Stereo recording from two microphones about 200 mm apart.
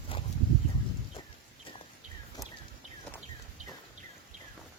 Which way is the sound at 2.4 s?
20° left (ahead or behind).